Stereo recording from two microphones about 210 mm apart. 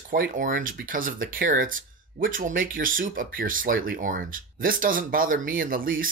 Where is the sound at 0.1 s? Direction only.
45° right (ahead or behind).